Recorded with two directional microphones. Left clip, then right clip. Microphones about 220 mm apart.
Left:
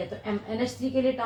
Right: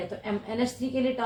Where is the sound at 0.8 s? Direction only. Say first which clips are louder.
Left 1 dB; 50° right (ahead or behind).